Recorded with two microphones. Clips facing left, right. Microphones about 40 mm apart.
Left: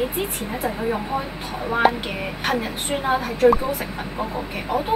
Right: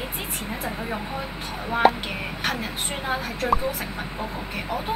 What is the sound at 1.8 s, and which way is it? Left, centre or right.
A woman's voice, centre.